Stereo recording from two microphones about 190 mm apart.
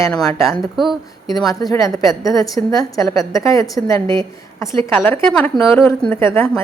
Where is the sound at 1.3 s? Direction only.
20° left (ahead or behind).